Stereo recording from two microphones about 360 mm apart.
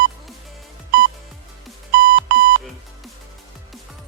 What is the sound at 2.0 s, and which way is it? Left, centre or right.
Alarm clock, right.